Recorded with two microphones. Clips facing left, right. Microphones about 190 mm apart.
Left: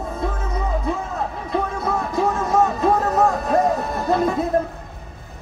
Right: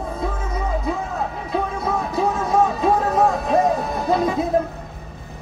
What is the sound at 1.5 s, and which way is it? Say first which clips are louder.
Music: left 1 dB; 5° right (ahead or behind).